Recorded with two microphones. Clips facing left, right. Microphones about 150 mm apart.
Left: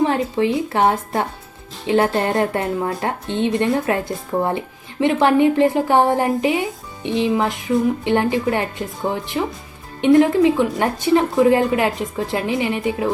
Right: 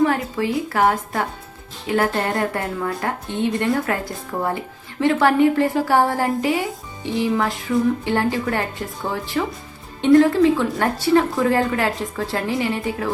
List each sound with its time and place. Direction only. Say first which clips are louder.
0.0 s speech: left 2 dB; 25° left (ahead or behind)